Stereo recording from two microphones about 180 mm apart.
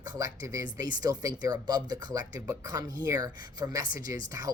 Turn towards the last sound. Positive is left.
turn(degrees=-20)  # may be behind; listen again after turning